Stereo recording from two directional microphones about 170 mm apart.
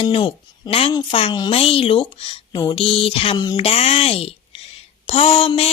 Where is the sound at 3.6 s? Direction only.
35° left (ahead or behind).